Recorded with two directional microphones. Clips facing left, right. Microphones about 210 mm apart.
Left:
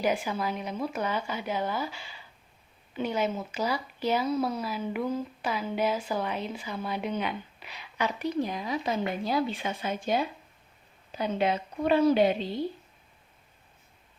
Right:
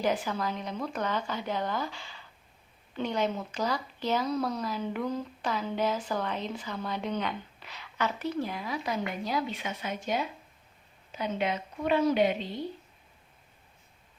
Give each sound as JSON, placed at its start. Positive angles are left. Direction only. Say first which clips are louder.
{"t": 0.0, "sound": "a woman's voice", "louder": "left 1 dB", "side_deg": 10}